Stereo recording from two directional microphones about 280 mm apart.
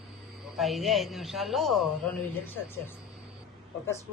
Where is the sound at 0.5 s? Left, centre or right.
Centre.